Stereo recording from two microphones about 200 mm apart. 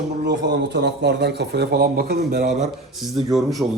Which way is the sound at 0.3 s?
55° right (ahead or behind).